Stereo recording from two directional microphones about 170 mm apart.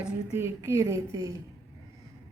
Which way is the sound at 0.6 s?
20° right (ahead or behind).